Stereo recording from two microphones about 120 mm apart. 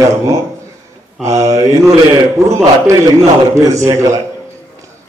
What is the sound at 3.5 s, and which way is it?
Speech, 25° right (ahead or behind).